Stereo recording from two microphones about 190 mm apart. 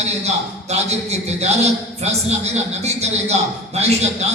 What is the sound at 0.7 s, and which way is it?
A man's voice, 35° right (ahead or behind).